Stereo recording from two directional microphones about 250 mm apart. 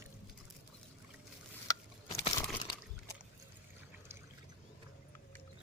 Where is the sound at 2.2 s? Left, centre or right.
Centre.